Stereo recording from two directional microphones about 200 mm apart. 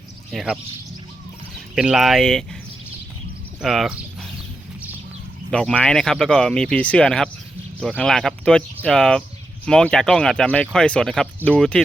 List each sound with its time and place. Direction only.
0.3 s speech: centre (ahead or behind)
1.7 s speech: 5° right (ahead or behind)
3.6 s speech: centre (ahead or behind)
5.5 s speech: 5° left (ahead or behind)